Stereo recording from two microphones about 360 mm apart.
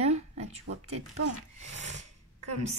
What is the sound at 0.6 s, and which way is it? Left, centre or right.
Speech, right.